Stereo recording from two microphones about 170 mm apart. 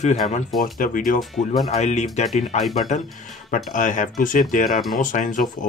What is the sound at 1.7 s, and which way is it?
Speech, 40° left (ahead or behind).